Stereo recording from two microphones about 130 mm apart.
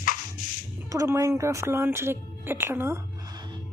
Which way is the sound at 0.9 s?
25° right (ahead or behind).